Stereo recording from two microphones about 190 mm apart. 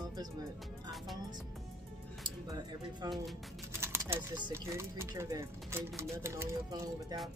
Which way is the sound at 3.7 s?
15° right (ahead or behind).